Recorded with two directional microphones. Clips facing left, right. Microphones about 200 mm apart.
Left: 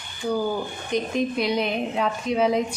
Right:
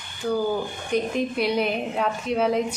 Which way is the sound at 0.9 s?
5° right (ahead or behind).